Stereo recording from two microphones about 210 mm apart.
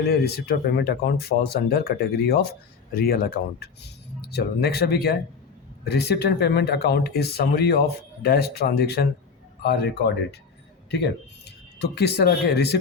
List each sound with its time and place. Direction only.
0.0 s speech: 50° left (ahead or behind)
11.8 s speech: 50° left (ahead or behind)